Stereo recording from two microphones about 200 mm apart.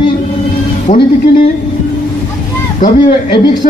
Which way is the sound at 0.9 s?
35° left (ahead or behind).